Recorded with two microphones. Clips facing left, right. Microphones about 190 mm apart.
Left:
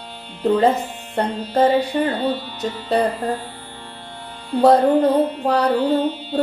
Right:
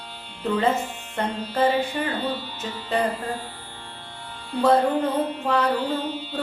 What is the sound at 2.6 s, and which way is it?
Mantra, 35° left (ahead or behind).